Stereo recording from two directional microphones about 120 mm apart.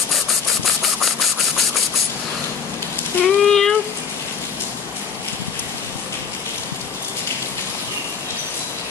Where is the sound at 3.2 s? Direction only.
Centre (ahead or behind).